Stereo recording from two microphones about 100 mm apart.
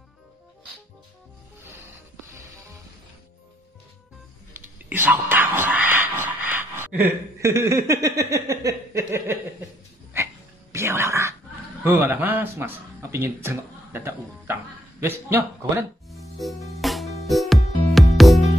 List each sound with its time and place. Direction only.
4.6 s music: 20° right (ahead or behind)
10.1 s a sound: 25° right (ahead or behind)
11.8 s a man's voice: 20° right (ahead or behind)
16.1 s music: centre (ahead or behind)